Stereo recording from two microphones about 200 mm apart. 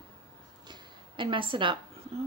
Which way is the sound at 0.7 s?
25° right (ahead or behind).